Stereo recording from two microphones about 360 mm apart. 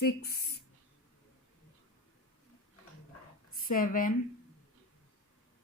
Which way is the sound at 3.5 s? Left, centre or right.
Left.